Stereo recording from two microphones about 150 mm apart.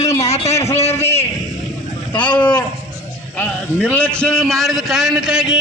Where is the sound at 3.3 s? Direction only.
10° left (ahead or behind).